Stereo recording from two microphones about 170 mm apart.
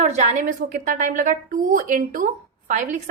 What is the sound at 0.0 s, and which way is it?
A woman's voice, 45° right (ahead or behind).